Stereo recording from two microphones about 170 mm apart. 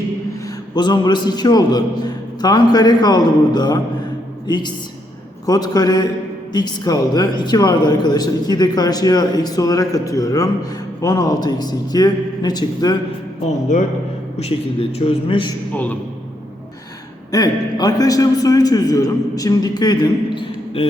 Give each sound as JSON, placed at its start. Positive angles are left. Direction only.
{"t": 0.4, "sound": "a woman's voice", "side_deg": 25}
{"t": 14.3, "sound": "a man's voice", "side_deg": 35}
{"t": 15.7, "sound": "a man's voice", "side_deg": 10}
{"t": 17.3, "sound": "a woman's voice", "side_deg": 20}